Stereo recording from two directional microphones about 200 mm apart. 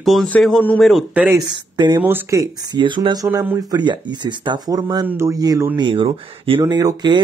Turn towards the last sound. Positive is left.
turn(degrees=-20)  # may be behind; listen again after turning